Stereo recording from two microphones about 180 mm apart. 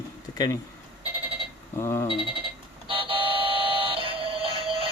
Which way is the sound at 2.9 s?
30° right (ahead or behind).